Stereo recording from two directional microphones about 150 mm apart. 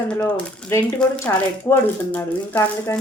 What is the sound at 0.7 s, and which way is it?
Speech, 20° left (ahead or behind).